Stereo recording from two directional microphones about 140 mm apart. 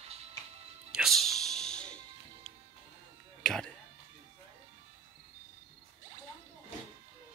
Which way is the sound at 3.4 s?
5° left (ahead or behind).